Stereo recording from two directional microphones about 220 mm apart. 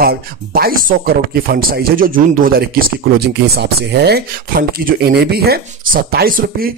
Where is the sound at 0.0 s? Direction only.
45° right (ahead or behind).